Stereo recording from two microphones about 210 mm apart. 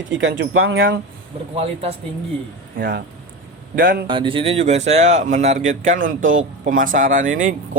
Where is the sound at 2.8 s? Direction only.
45° right (ahead or behind).